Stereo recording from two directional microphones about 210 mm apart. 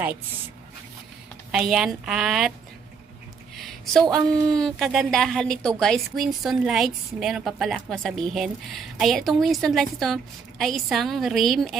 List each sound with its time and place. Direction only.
1.5 s a woman's voice: 5° right (ahead or behind)
3.6 s a woman's voice: centre (ahead or behind)
4.3 s speech: 20° right (ahead or behind)
4.6 s a woman's voice: centre (ahead or behind)